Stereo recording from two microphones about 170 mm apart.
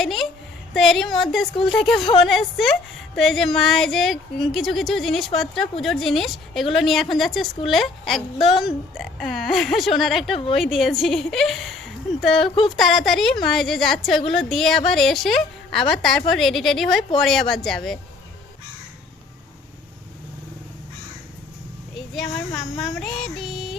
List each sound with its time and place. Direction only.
0.0 s a sound: centre (ahead or behind)
0.7 s a woman's voice: centre (ahead or behind)
12.4 s speech: 30° left (ahead or behind)
12.8 s a woman's voice: centre (ahead or behind)
21.9 s speech: centre (ahead or behind)
23.0 s music: centre (ahead or behind)